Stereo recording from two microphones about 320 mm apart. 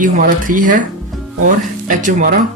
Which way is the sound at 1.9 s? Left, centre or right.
Right.